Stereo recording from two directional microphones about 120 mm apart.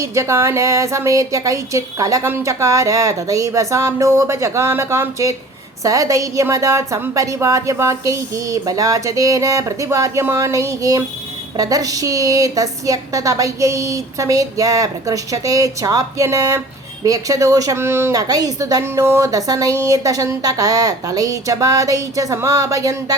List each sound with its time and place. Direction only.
0.0 s a woman's voice: 25° right (ahead or behind)